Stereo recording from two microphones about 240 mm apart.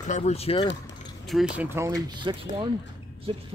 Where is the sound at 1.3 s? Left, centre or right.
Centre.